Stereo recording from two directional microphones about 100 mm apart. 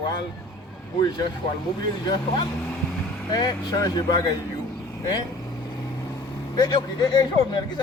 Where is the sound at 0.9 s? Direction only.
45° left (ahead or behind).